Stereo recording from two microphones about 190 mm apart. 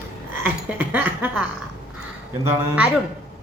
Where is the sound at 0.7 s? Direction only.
10° right (ahead or behind).